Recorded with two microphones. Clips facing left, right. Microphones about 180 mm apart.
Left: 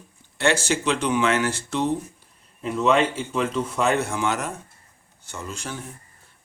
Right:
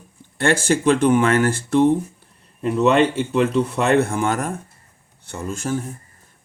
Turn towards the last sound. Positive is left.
turn(degrees=-45)  # may be behind; listen again after turning